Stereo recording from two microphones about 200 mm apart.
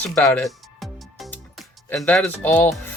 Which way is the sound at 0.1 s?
10° left (ahead or behind).